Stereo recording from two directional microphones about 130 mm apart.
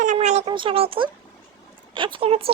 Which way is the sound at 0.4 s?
40° right (ahead or behind).